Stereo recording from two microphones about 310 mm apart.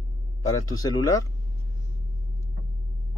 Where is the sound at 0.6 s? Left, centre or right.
Centre.